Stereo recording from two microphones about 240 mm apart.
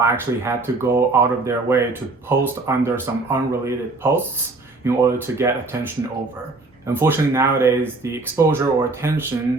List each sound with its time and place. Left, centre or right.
0.0 s speech: centre
6.8 s speech: centre